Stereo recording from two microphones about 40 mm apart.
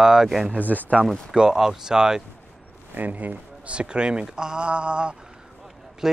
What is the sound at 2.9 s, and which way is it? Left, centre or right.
Speech, right.